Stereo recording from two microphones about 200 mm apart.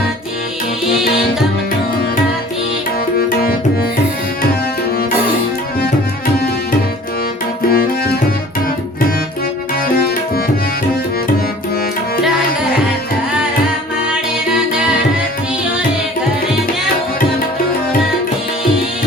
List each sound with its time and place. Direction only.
3.2 s music: 50° left (ahead or behind)
7.7 s music: 50° left (ahead or behind)
9.9 s tabla: 50° left (ahead or behind)